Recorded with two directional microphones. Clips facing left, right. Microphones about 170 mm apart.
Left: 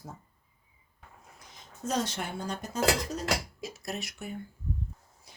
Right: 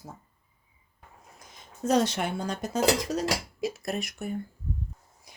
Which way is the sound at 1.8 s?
70° right (ahead or behind).